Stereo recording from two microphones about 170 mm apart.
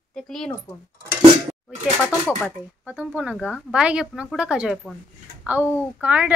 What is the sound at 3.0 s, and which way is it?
A woman's voice, 5° right (ahead or behind).